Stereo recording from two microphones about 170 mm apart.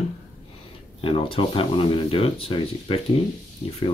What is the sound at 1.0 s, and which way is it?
Speech, 30° left (ahead or behind).